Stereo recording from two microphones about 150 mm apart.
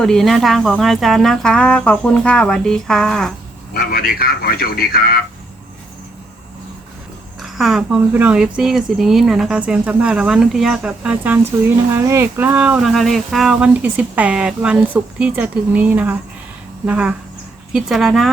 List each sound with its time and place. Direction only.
0.0 s speech: 5° left (ahead or behind)
3.8 s speech: 90° left
7.4 s speech: centre (ahead or behind)